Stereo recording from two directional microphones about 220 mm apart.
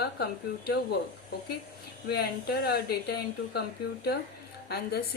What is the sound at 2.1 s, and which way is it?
A woman's voice, 45° left (ahead or behind).